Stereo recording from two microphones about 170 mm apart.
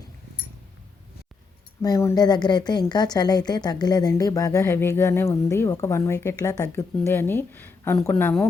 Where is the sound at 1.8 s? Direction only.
20° left (ahead or behind).